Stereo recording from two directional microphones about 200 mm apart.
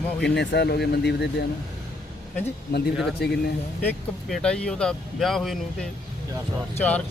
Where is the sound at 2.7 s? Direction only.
50° left (ahead or behind).